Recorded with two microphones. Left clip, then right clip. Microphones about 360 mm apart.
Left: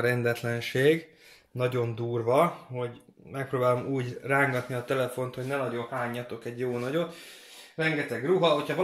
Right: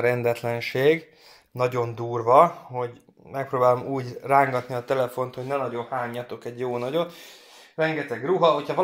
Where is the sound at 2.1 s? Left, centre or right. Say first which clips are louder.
Right 8 dB; centre.